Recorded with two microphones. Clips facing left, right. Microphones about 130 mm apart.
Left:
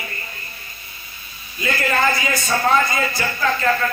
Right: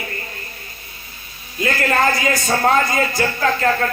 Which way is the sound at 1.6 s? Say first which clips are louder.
Right 2 dB; 45° right (ahead or behind).